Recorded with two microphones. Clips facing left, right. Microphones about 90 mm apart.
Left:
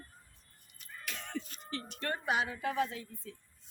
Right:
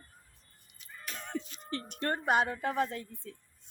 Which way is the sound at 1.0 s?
40° right (ahead or behind).